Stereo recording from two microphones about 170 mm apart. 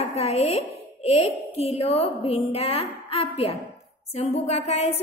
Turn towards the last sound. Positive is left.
turn(degrees=40)  # may be behind; listen again after turning